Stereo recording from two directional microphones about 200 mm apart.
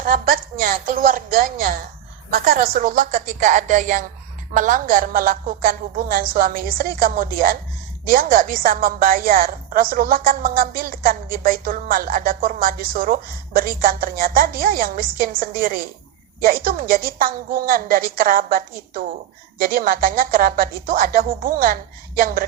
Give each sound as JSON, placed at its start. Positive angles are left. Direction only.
{"t": 0.0, "sound": "a woman's voice", "side_deg": -45}